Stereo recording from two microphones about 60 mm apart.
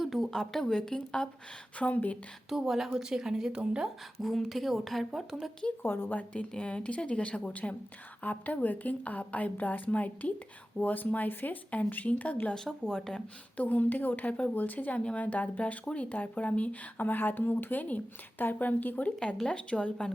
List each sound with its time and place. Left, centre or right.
0.0 s speech: centre
1.8 s speech: left
2.5 s speech: centre
4.2 s speech: centre
5.8 s a woman's voice: left
6.1 s speech: left
12.5 s a woman's voice: centre
13.6 s speech: left
19.4 s a woman's voice: centre